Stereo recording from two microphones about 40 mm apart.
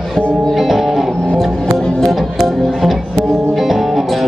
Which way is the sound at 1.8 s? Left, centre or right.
Centre.